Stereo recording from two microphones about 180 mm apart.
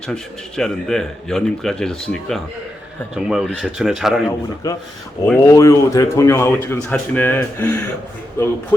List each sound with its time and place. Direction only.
0.1 s speech: 5° left (ahead or behind)
4.3 s a man's voice: 20° left (ahead or behind)